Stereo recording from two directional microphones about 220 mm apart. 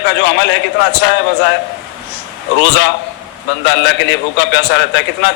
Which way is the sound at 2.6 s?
50° left (ahead or behind).